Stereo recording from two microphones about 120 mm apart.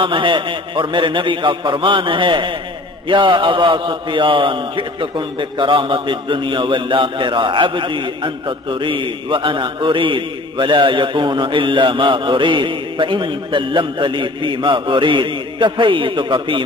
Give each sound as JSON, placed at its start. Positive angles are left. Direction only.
{"t": 0.0, "sound": "a man's voice", "side_deg": -45}